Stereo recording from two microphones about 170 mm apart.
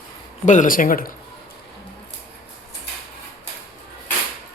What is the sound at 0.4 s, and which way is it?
Speech, 50° left (ahead or behind).